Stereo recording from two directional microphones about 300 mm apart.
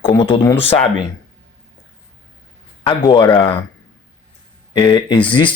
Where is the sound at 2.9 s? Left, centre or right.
Centre.